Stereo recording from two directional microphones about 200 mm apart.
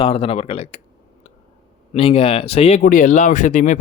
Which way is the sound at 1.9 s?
30° left (ahead or behind).